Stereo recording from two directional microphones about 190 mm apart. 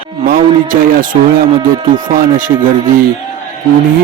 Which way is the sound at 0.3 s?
45° right (ahead or behind).